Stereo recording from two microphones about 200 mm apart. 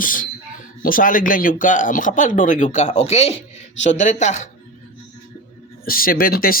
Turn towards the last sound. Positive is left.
turn(degrees=45)  # may be behind; listen again after turning